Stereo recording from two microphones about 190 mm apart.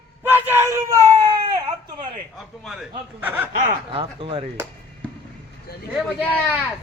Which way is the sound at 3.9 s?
30° right (ahead or behind).